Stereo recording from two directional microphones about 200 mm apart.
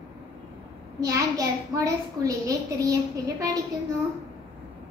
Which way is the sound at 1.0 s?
15° right (ahead or behind).